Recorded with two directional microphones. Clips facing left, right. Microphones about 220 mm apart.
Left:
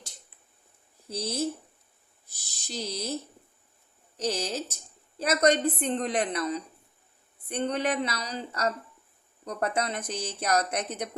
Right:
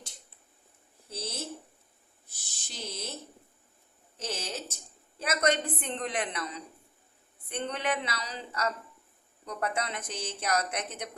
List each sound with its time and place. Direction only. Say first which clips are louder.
1.1 s speech: left 8 dB; 40° left (ahead or behind)
2.6 s speech: left 6 dB; 40° left (ahead or behind)
4.2 s speech: left 7 dB; 40° left (ahead or behind)